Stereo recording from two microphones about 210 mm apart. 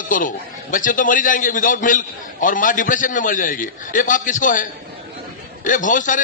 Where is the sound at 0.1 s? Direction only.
40° left (ahead or behind).